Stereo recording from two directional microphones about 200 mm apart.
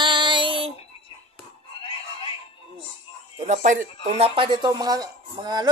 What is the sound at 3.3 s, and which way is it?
Speech, 35° right (ahead or behind).